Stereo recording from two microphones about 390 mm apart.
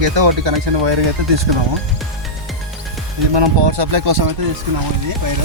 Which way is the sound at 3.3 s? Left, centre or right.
Right.